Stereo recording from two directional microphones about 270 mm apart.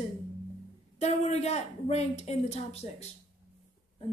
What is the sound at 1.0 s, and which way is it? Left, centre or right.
A woman's voice, left.